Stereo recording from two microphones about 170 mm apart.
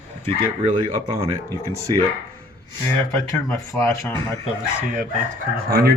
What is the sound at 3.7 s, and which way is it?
Speech, 15° left (ahead or behind).